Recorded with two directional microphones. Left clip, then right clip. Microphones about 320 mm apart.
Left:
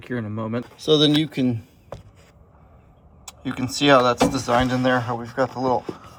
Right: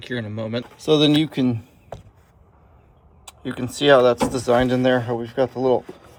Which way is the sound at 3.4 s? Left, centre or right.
Centre.